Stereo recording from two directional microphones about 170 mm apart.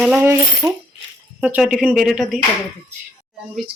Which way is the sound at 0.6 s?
20° right (ahead or behind).